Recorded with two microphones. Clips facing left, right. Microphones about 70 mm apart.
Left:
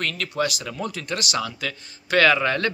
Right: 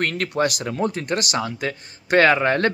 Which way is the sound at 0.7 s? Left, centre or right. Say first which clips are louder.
Right 6 dB; right.